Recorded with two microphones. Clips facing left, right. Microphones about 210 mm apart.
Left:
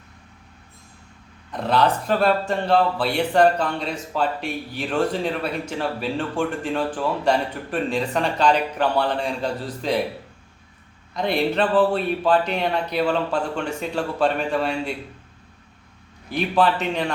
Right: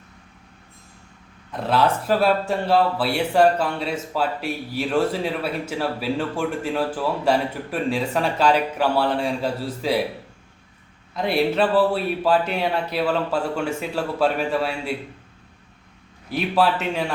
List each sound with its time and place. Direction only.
1.5 s speech: 5° right (ahead or behind)
11.1 s speech: 5° right (ahead or behind)
16.3 s speech: 5° right (ahead or behind)